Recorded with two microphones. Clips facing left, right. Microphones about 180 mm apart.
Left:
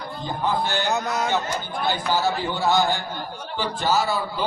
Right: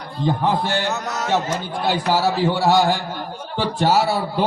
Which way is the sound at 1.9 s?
80° right.